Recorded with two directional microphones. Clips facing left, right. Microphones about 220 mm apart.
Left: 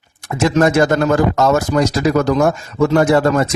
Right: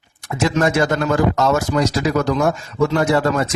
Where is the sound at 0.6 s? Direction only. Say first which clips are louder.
Left 5 dB; 45° left (ahead or behind).